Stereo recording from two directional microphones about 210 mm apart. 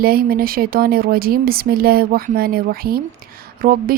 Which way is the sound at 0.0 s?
45° right (ahead or behind).